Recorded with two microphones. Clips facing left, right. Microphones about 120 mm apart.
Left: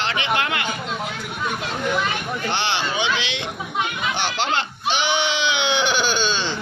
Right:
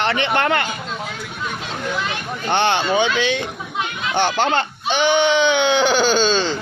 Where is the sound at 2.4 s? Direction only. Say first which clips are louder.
Right 8 dB; 55° right (ahead or behind).